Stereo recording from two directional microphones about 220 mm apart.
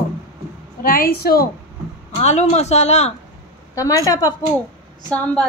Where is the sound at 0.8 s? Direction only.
40° left (ahead or behind).